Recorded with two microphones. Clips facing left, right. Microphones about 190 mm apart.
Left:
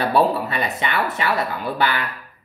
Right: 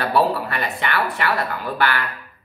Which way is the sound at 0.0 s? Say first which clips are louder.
Left 1 dB; 20° left (ahead or behind).